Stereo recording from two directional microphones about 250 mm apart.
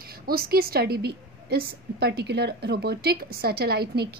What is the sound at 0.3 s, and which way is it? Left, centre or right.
A woman's voice, right.